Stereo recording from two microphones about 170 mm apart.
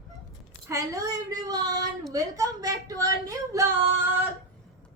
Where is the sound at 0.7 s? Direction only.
20° right (ahead or behind).